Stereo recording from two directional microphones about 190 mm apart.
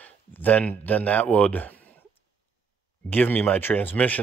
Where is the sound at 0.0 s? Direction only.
10° left (ahead or behind).